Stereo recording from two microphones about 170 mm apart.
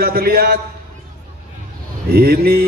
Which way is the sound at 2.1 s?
65° right (ahead or behind).